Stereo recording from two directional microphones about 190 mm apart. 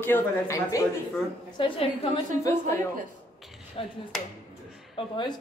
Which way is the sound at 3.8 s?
30° left (ahead or behind).